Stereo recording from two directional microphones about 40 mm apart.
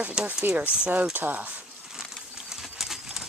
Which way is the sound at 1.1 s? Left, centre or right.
Right.